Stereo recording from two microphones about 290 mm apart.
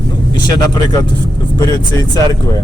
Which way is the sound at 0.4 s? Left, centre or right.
Centre.